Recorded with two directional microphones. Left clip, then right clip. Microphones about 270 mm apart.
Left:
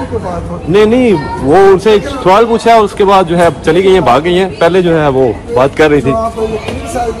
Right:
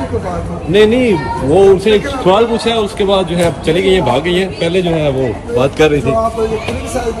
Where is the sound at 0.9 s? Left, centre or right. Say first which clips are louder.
Left 3 dB; centre.